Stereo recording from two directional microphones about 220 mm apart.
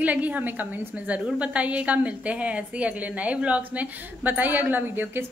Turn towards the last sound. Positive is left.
turn(degrees=-10)  # may be behind; listen again after turning